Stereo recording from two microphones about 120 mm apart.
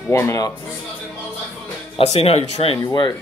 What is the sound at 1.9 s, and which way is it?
Speech, 55° left (ahead or behind).